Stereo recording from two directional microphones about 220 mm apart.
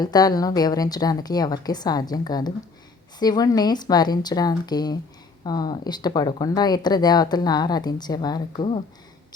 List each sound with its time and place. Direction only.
0.0 s a woman's voice: 15° left (ahead or behind)